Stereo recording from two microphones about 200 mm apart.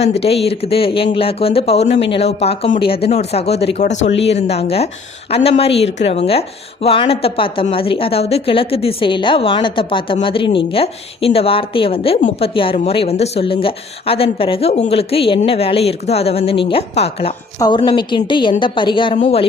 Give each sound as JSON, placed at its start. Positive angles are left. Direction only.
{"t": 0.0, "sound": "a woman's voice", "side_deg": 30}